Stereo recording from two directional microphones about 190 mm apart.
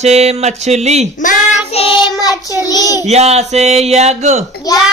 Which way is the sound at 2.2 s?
20° left (ahead or behind).